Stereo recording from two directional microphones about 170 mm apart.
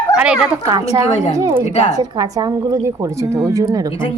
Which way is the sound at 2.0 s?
20° right (ahead or behind).